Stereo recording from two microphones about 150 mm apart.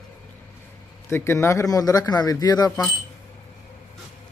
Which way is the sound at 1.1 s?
15° left (ahead or behind).